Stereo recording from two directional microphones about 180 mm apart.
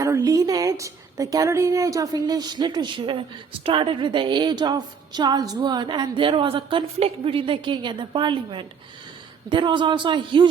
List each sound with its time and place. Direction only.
0.0 s a woman's voice: 20° right (ahead or behind)